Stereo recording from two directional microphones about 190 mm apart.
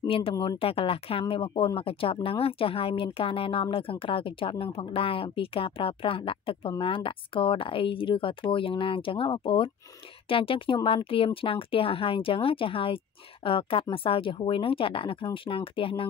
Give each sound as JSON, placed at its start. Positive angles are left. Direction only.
{"t": 0.0, "sound": "speech", "side_deg": 30}